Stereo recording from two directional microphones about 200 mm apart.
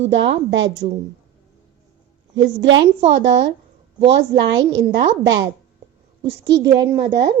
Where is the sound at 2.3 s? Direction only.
65° right (ahead or behind).